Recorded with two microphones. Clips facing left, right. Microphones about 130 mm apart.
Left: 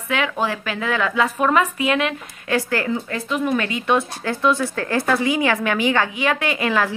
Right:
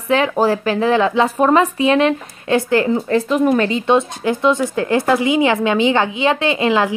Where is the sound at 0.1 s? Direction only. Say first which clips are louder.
Right 7 dB; 35° right (ahead or behind).